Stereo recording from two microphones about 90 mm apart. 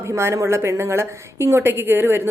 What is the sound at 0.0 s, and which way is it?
A woman's voice, 30° right (ahead or behind).